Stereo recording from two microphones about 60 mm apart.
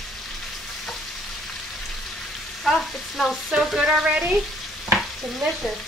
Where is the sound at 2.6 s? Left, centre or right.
Centre; by 4.4 s right.